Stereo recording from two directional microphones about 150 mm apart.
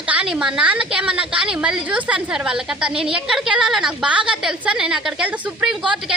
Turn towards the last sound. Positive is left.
turn(degrees=-10)  # may be behind; listen again after turning